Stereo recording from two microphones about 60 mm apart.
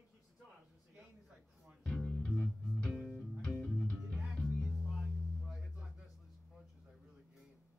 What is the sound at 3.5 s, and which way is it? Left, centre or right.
Music, centre.